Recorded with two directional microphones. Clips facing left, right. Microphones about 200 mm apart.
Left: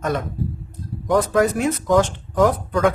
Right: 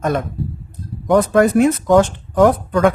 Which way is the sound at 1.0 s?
60° right (ahead or behind).